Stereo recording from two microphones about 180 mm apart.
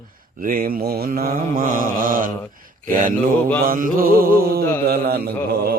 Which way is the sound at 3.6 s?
50° right (ahead or behind).